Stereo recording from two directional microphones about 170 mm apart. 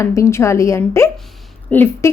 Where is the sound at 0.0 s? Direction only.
15° left (ahead or behind).